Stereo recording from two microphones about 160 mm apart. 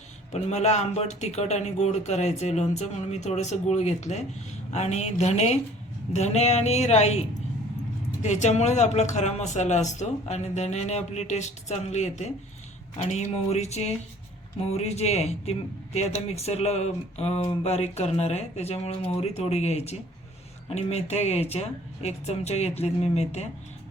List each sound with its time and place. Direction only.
0.3 s a man's voice: 40° left (ahead or behind)